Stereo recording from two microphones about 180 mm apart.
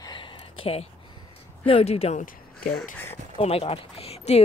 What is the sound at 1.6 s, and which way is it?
Speech, 35° left (ahead or behind).